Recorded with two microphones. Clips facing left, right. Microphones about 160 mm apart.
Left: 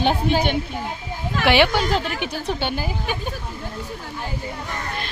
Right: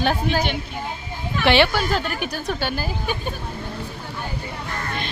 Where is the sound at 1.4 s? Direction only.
10° left (ahead or behind).